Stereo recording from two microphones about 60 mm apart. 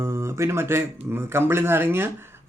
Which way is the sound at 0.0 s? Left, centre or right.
Right.